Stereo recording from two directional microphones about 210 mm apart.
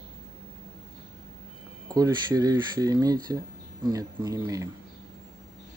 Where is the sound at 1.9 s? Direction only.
15° right (ahead or behind).